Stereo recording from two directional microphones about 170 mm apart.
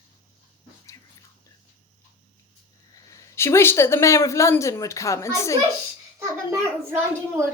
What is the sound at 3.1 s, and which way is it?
A woman's voice, 15° left (ahead or behind).